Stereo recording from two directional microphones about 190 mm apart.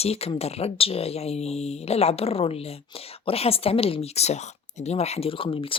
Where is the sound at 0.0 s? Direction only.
30° left (ahead or behind).